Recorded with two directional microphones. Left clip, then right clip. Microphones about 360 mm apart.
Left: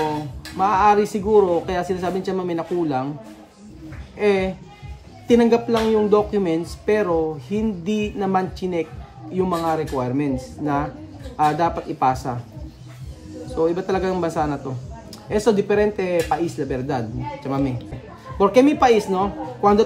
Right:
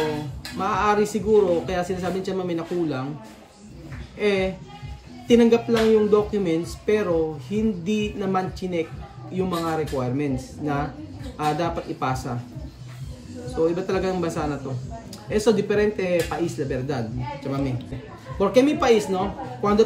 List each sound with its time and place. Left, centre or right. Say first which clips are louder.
0.6 s speech: left 5 dB; centre
4.2 s speech: left 3 dB; centre
13.6 s speech: left 2 dB; centre